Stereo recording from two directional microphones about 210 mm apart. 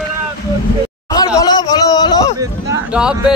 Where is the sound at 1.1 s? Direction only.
20° left (ahead or behind).